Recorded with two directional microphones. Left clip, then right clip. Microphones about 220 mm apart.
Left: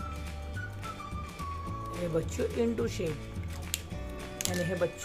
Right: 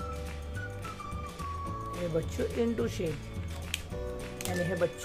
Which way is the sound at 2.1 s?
5° left (ahead or behind).